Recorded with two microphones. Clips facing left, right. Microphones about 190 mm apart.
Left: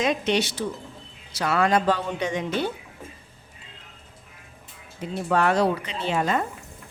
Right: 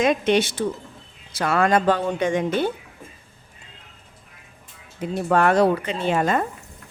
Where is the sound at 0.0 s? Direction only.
50° right (ahead or behind).